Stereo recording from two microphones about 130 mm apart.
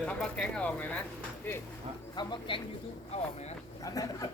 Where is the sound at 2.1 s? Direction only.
40° left (ahead or behind).